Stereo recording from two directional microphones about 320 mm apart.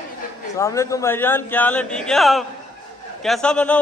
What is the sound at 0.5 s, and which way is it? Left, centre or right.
A man's voice, centre.